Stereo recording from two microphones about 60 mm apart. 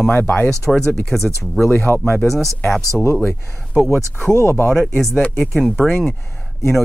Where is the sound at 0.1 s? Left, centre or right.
Left.